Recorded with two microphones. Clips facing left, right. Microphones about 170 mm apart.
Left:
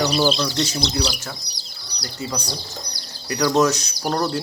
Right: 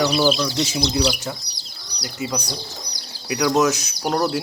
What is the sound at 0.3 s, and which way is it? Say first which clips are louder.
Speech: right 1 dB; 10° right (ahead or behind).